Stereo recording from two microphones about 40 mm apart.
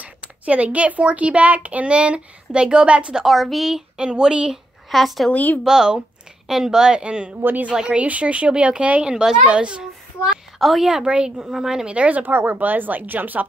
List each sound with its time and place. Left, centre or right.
0.0 s speech: right
3.3 s speech: centre
4.8 s speech: centre
5.3 s speech: left
5.7 s speech: centre; by 9.0 s right
9.0 s speech: centre
9.5 s a woman's voice: right
10.6 s a woman's voice: centre
11.1 s a woman's voice: right
11.5 s speech: centre
11.8 s speech: right
12.3 s speech: right
12.5 s speech: right